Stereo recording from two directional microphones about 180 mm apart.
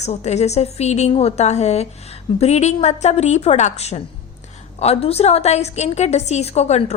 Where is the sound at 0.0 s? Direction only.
40° left (ahead or behind).